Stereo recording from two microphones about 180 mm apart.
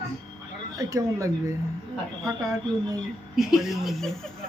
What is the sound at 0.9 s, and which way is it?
Speech, 15° right (ahead or behind).